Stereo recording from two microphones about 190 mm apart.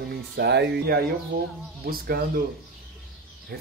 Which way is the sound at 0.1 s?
60° right (ahead or behind).